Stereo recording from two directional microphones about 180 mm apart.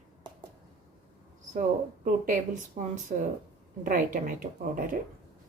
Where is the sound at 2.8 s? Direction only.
40° right (ahead or behind).